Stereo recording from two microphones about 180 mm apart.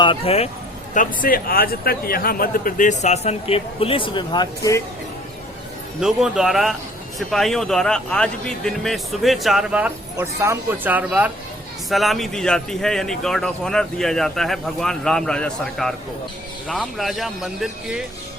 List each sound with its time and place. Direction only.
0.0 s speech: 30° left (ahead or behind)
0.9 s a man's voice: 50° left (ahead or behind); by 4.8 s 20° left (ahead or behind)
6.0 s speech: centre (ahead or behind)